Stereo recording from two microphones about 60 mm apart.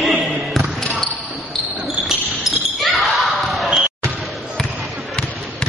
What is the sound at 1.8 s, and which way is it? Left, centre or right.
Basketball bounce, centre.